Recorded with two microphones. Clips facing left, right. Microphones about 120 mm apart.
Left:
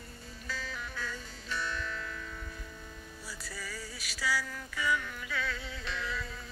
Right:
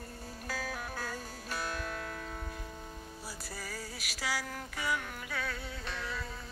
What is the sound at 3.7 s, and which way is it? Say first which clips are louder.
Music: right 1 dB; 60° right (ahead or behind).